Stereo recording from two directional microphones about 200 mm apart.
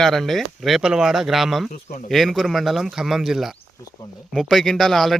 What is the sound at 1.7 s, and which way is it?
Speech, 40° left (ahead or behind).